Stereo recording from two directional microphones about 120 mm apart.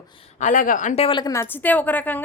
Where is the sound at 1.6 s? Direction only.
15° left (ahead or behind).